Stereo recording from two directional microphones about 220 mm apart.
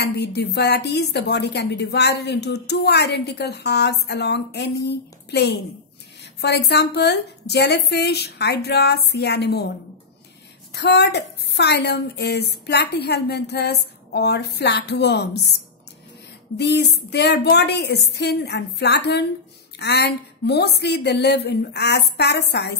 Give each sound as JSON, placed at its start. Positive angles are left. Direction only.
{"t": 0.0, "sound": "a woman's voice", "side_deg": 50}
{"t": 10.7, "sound": "a woman's voice", "side_deg": 50}
{"t": 16.5, "sound": "a woman's voice", "side_deg": 50}